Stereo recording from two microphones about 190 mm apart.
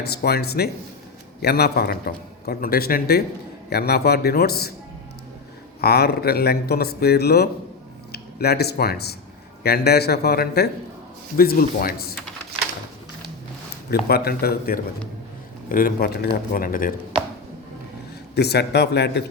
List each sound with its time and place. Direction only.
0.1 s a man's voice: 55° left (ahead or behind)
5.8 s a man's voice: 55° left (ahead or behind)
14.1 s speech: 55° left (ahead or behind)
18.3 s a man's voice: 60° left (ahead or behind)